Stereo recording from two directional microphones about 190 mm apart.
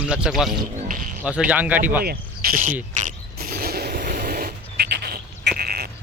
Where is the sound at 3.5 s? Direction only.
55° right (ahead or behind).